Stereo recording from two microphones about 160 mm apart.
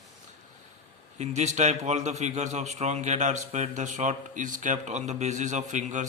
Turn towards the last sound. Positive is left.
turn(degrees=-50)  # may be behind; listen again after turning